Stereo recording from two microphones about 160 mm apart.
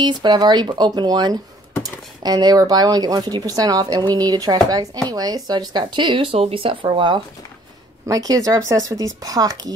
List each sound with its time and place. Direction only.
0.0 s speech: 30° right (ahead or behind)